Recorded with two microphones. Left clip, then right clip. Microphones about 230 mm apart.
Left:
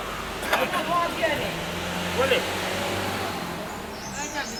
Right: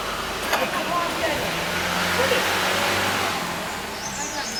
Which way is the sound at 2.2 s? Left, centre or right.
Centre.